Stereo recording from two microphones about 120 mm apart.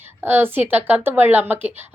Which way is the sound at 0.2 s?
15° right (ahead or behind).